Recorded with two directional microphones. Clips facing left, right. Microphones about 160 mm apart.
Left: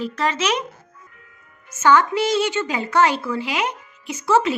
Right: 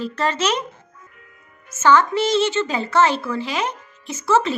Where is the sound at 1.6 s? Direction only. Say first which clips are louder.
Even; 15° left (ahead or behind).